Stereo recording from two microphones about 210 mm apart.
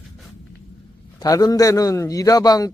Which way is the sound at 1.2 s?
15° left (ahead or behind).